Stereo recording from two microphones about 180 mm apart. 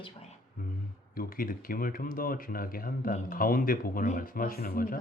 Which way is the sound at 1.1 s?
50° left (ahead or behind).